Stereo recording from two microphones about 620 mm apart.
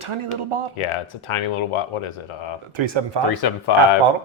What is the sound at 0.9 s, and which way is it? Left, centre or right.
Speech, left.